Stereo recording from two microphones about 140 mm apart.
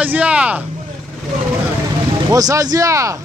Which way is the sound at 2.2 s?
25° right (ahead or behind).